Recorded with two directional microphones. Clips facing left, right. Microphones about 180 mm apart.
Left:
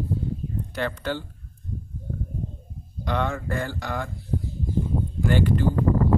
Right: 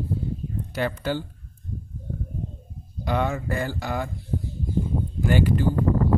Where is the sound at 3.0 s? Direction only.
10° right (ahead or behind).